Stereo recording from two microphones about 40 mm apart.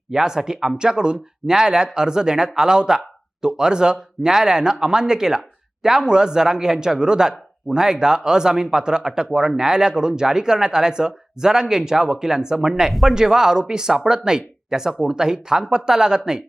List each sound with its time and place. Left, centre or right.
0.1 s speech: centre